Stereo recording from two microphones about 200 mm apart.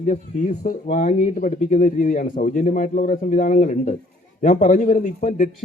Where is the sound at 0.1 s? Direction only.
40° left (ahead or behind).